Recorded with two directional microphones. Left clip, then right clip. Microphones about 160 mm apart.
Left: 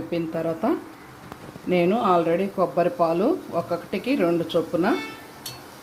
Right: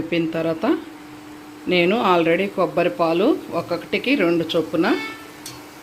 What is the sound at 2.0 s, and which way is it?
Speech, 25° right (ahead or behind).